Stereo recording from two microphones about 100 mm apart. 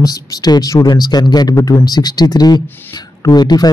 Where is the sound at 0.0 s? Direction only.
40° left (ahead or behind).